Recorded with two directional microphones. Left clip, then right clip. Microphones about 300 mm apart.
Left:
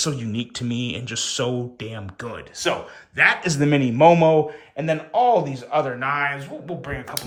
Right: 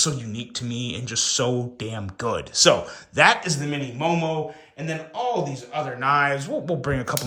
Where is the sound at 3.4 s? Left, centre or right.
Centre.